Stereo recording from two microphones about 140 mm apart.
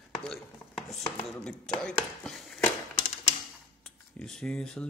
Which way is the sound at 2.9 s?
55° left (ahead or behind).